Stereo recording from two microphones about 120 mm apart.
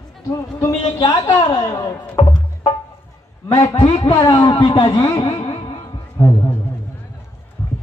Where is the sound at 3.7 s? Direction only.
45° left (ahead or behind).